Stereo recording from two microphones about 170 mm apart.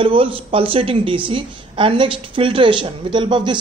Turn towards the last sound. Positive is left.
turn(degrees=-30)  # may be behind; listen again after turning